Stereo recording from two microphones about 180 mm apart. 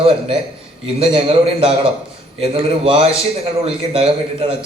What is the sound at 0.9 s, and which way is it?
A man's voice, 30° right (ahead or behind).